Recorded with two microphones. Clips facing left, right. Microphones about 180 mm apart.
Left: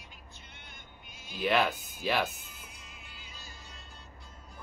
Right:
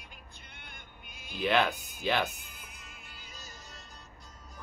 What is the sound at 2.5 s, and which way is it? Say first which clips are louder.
Music: even; 55° right (ahead or behind).